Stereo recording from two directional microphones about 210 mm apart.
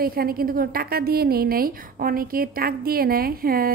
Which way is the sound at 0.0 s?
45° right (ahead or behind).